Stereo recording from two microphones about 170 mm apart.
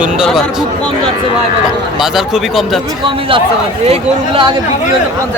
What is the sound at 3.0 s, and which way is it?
Speech, 30° right (ahead or behind).